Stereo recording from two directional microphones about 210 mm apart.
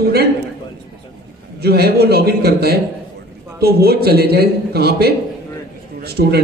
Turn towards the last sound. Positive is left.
turn(degrees=-50)  # may be behind; listen again after turning